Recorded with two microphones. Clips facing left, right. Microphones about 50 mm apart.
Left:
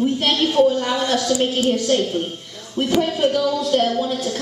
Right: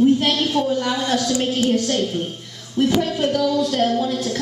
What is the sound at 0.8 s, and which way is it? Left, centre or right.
Speech, left.